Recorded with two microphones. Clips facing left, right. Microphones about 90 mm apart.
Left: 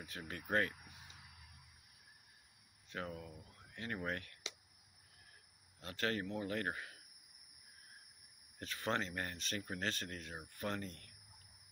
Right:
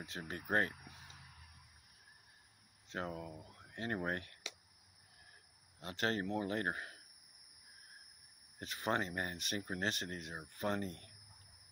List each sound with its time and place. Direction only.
0.2 s speech: 30° right (ahead or behind)
2.9 s speech: 30° right (ahead or behind)
5.8 s speech: 25° right (ahead or behind)
8.5 s speech: 20° right (ahead or behind)